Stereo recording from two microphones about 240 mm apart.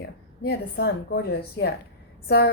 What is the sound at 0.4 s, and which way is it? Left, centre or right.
A woman's voice, left.